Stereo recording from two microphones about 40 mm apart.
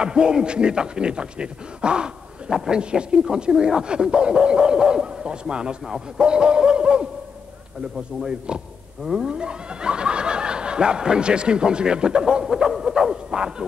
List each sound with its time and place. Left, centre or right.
0.0 s a man's voice: right
6.2 s speech: right
9.0 s a man's voice: centre
9.3 s speech: right